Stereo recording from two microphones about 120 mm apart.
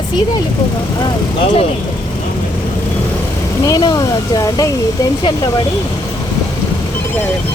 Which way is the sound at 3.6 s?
30° left (ahead or behind).